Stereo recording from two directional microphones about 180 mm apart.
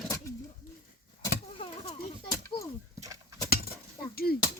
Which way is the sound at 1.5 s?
30° left (ahead or behind).